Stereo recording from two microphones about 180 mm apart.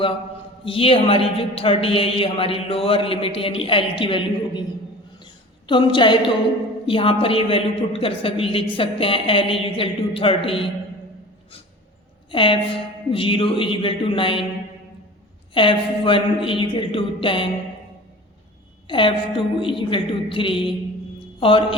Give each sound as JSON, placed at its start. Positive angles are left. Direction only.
{"t": 0.6, "sound": "a man's voice", "side_deg": 30}
{"t": 5.2, "sound": "a sound", "side_deg": 25}
{"t": 6.8, "sound": "a man's voice", "side_deg": 30}
{"t": 12.3, "sound": "a woman's voice", "side_deg": 30}
{"t": 15.5, "sound": "a woman's voice", "side_deg": 30}
{"t": 18.9, "sound": "a woman's voice", "side_deg": 25}